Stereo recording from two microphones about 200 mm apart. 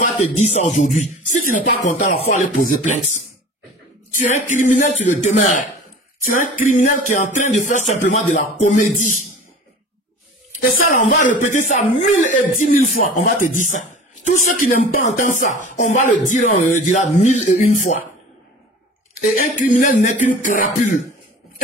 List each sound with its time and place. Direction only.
0.0 s speech: 35° left (ahead or behind)
4.2 s speech: 40° left (ahead or behind)
6.2 s music: 45° left (ahead or behind)
7.3 s speech: 40° left (ahead or behind)
10.9 s speech: 40° left (ahead or behind)
19.3 s speech: 40° left (ahead or behind)